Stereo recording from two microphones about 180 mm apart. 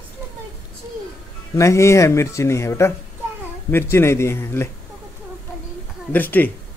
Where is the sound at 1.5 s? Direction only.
15° left (ahead or behind).